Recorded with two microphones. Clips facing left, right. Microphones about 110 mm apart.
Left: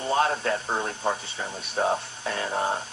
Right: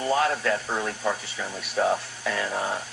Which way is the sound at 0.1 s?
30° left (ahead or behind).